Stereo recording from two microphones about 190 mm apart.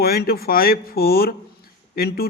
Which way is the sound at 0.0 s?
55° left (ahead or behind).